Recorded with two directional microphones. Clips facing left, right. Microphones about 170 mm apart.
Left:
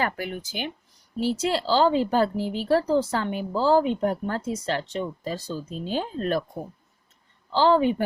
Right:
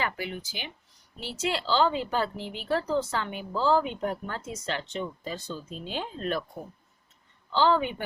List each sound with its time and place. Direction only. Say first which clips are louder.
0.0 s speech: left 4 dB; 50° left (ahead or behind)
1.2 s speech: left 7 dB; 40° left (ahead or behind)
7.5 s speech: left 5 dB; 35° left (ahead or behind)